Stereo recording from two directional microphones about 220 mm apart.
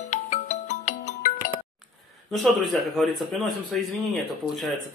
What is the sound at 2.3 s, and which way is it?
Speech, centre (ahead or behind).